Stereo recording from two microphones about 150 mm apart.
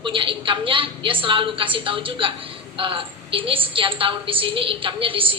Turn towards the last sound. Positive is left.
turn(degrees=-35)  # may be behind; listen again after turning